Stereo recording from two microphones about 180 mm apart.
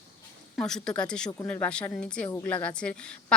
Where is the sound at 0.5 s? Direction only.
5° left (ahead or behind).